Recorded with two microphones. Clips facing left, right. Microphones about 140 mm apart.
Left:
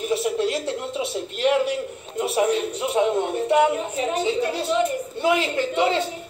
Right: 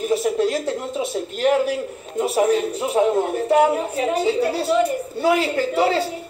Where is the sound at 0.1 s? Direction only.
45° right (ahead or behind).